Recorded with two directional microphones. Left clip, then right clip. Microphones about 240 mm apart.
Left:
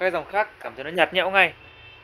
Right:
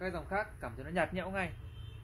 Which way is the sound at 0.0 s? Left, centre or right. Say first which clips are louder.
Left 14 dB; left.